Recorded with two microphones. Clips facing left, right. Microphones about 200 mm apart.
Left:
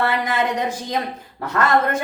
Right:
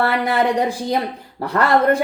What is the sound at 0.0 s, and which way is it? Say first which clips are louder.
A woman's voice: right 3 dB; 35° right (ahead or behind).